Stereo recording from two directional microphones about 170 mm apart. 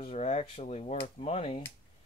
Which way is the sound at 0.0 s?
40° left (ahead or behind).